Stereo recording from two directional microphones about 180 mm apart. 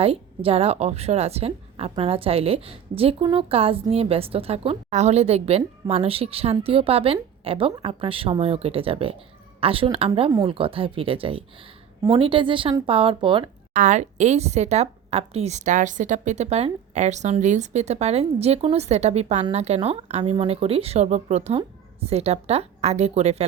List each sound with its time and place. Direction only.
0.0 s a woman's voice: 30° right (ahead or behind)
13.7 s a woman's voice: 40° right (ahead or behind)